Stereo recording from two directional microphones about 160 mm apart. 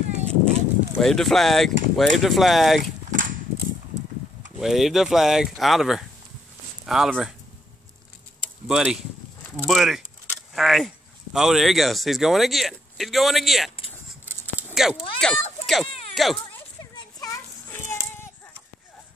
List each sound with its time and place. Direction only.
0.3 s speech: 5° left (ahead or behind)
4.6 s speech: centre (ahead or behind)
8.6 s speech: 5° right (ahead or behind)
14.7 s speech: centre (ahead or behind)
15.6 s baby cry: centre (ahead or behind)
16.2 s speech: centre (ahead or behind)
16.9 s child singing: 20° left (ahead or behind)